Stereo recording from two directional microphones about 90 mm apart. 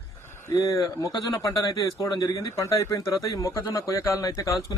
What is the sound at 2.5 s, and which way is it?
Speech, 30° left (ahead or behind).